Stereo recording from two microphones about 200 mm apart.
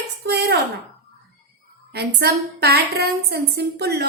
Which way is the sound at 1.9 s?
55° right (ahead or behind).